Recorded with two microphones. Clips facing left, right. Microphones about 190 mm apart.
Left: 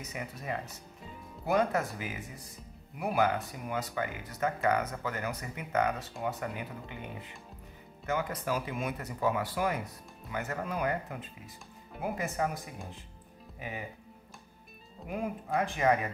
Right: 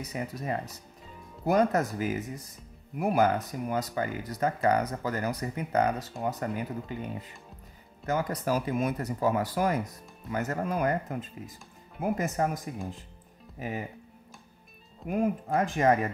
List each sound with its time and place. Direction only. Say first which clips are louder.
0.0 s speech: right 5 dB; 35° right (ahead or behind)
15.0 s speech: right 7 dB; 45° right (ahead or behind)